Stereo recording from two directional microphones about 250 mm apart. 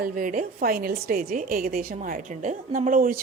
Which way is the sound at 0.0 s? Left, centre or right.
Right.